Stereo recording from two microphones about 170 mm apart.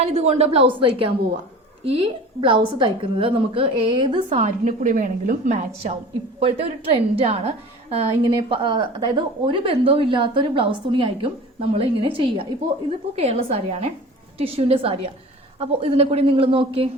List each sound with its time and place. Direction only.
0.0 s a woman's voice: 40° right (ahead or behind)
4.3 s a woman's voice: 45° right (ahead or behind)
6.4 s a woman's voice: 35° right (ahead or behind)